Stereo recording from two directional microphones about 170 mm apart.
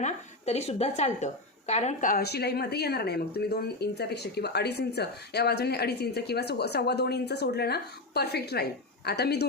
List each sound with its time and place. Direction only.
0.0 s a woman's voice: 40° left (ahead or behind); by 9.5 s 75° left (ahead or behind)